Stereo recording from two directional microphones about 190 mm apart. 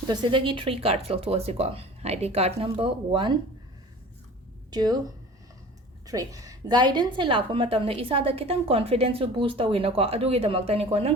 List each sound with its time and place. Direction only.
0.1 s a woman's voice: 25° right (ahead or behind)
4.7 s speech: 20° right (ahead or behind)
6.1 s a woman's voice: 20° right (ahead or behind)